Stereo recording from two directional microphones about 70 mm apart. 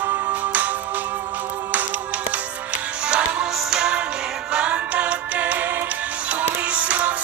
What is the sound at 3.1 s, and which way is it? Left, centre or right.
Music, centre.